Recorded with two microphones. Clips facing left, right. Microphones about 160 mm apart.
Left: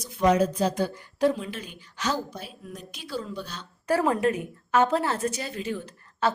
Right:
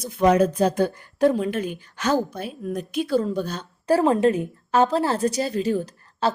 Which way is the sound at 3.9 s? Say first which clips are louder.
Right 5 dB; 30° right (ahead or behind).